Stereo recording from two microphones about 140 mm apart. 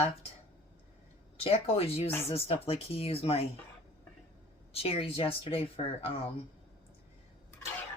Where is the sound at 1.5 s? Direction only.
45° left (ahead or behind).